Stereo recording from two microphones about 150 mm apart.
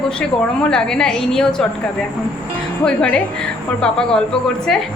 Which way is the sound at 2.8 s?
5° left (ahead or behind).